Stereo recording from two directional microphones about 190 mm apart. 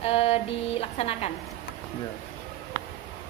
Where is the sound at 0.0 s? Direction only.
30° left (ahead or behind).